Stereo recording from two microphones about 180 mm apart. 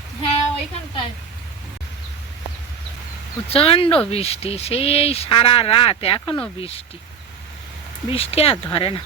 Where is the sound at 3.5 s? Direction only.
30° left (ahead or behind).